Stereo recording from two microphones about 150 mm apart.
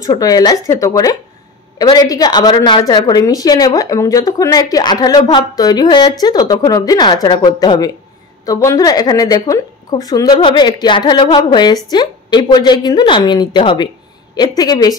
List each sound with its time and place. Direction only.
0.0 s a woman's voice: 25° left (ahead or behind)